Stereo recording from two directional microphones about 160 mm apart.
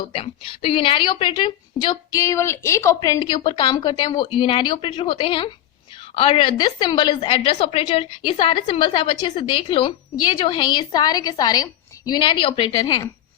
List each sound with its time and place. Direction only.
0.1 s a woman's voice: 35° left (ahead or behind)